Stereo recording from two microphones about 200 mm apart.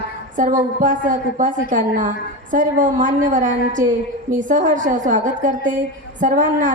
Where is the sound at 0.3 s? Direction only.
40° right (ahead or behind).